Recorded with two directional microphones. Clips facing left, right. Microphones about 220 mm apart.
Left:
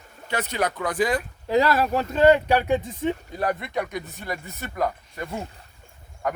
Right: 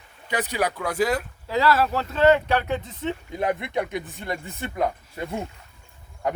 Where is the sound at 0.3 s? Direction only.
15° right (ahead or behind).